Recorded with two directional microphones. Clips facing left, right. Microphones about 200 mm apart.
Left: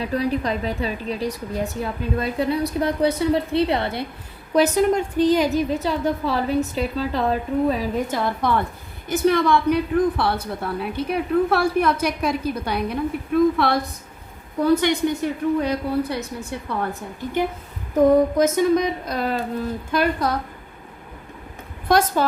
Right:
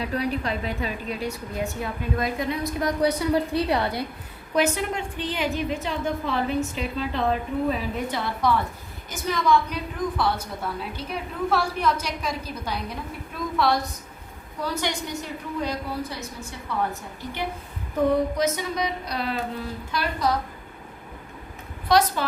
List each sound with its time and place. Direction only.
0.0 s a woman's voice: 35° left (ahead or behind)
4.5 s a woman's voice: 40° left (ahead or behind)
8.1 s a woman's voice: 50° left (ahead or behind)
17.9 s a woman's voice: 45° left (ahead or behind)
21.8 s speech: 50° left (ahead or behind)